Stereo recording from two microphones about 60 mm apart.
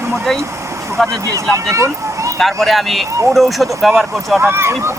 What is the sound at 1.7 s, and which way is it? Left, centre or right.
Speech, right.